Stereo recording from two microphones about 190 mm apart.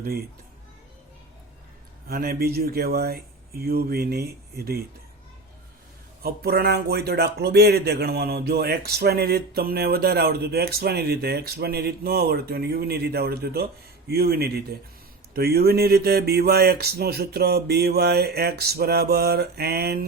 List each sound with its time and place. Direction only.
0.0 s speech: 55° right (ahead or behind)
2.0 s speech: 50° right (ahead or behind)
6.2 s speech: 55° right (ahead or behind)